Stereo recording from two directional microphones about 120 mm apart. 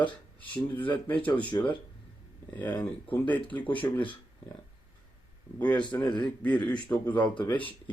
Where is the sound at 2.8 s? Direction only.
15° left (ahead or behind).